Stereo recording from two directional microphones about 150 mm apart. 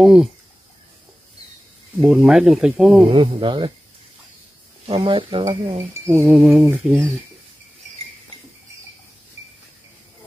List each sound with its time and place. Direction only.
0.0 s speech: 5° right (ahead or behind)
2.0 s speech: centre (ahead or behind)
3.1 s speech: 35° right (ahead or behind)
4.8 s speech: 35° right (ahead or behind)
6.2 s speech: 5° right (ahead or behind)